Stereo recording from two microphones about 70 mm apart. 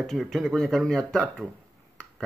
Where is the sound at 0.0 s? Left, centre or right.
Centre.